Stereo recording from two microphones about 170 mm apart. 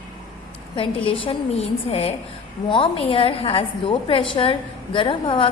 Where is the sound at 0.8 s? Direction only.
30° left (ahead or behind).